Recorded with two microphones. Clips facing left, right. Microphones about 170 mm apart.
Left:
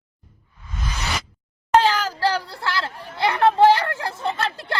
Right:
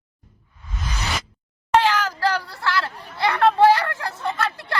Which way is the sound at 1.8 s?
35° left (ahead or behind).